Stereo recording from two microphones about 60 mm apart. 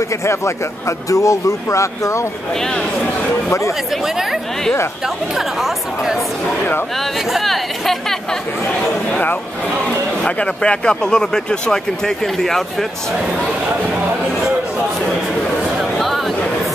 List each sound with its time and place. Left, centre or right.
0.8 s speech: left
4.0 s speech: centre
7.3 s speech: centre
10.2 s speech: centre
15.8 s a sound: centre